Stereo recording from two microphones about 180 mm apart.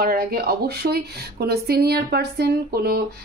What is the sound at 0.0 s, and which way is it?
A woman's voice, 60° right (ahead or behind).